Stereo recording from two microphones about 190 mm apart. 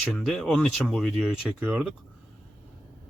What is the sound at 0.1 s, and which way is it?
Speech, 5° left (ahead or behind).